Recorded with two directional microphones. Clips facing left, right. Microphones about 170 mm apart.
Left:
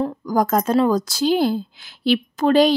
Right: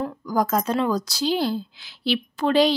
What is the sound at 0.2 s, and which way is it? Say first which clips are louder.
Speech: left 2 dB; 45° left (ahead or behind).